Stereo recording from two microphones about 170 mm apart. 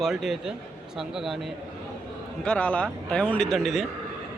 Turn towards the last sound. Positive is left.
turn(degrees=0)  # may be behind; listen again after turning